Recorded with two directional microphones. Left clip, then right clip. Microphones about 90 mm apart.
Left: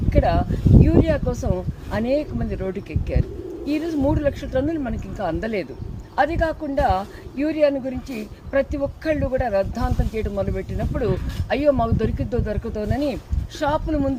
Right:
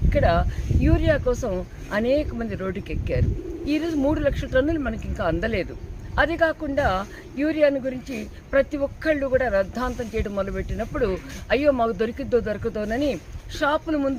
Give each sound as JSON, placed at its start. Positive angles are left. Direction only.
{"t": 0.1, "sound": "speech", "side_deg": -25}